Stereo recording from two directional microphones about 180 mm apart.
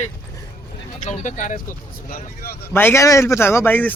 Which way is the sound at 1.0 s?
40° left (ahead or behind).